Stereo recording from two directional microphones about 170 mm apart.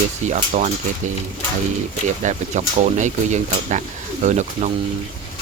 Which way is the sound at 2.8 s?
45° right (ahead or behind).